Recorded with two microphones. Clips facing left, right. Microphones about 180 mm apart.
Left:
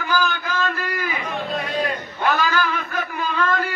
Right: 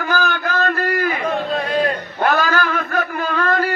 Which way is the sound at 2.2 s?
50° right (ahead or behind).